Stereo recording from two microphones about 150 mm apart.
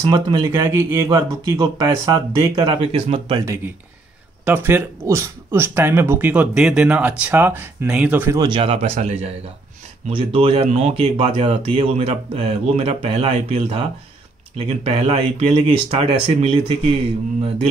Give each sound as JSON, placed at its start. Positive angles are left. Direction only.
{"t": 0.1, "sound": "speech", "side_deg": -20}
{"t": 4.5, "sound": "speech", "side_deg": -15}
{"t": 8.4, "sound": "speech", "side_deg": -35}